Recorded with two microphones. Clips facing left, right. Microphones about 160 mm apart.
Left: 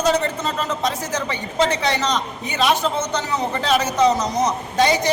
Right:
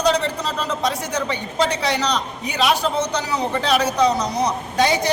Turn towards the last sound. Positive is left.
turn(degrees=0)  # may be behind; listen again after turning